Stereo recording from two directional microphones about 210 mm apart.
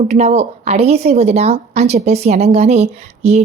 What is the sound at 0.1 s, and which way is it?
A woman's voice, 30° right (ahead or behind).